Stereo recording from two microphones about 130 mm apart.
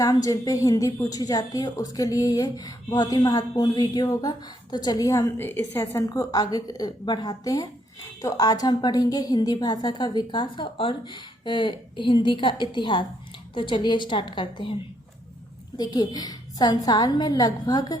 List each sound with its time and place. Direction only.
0.0 s a woman's voice: 25° left (ahead or behind)
15.8 s a woman's voice: 35° left (ahead or behind)